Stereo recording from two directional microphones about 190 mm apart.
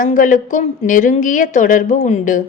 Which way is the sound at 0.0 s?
45° left (ahead or behind).